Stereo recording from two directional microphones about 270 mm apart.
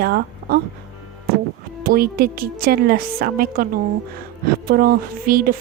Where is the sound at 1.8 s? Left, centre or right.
Right.